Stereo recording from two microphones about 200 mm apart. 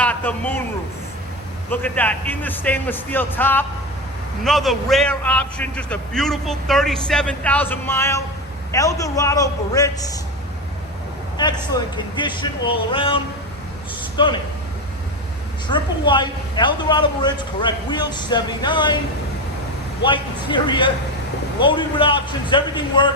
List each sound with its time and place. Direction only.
0.0 s a man's voice: 10° left (ahead or behind)
1.7 s a man's voice: 10° left (ahead or behind)
11.3 s speech: 20° left (ahead or behind)
15.6 s speech: 25° left (ahead or behind)
20.1 s speech: 25° left (ahead or behind)